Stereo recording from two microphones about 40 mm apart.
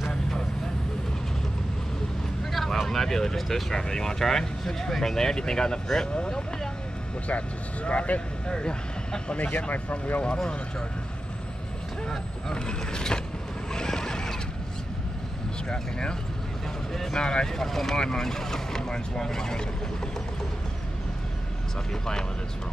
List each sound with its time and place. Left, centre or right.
0.1 s vehicle: centre
2.5 s vehicle: centre
3.7 s speech: centre
7.2 s speech: left
8.5 s speech: centre
9.6 s speech: left
10.2 s speech: left
12.5 s speech: left
13.7 s a sound: centre
15.7 s speech: left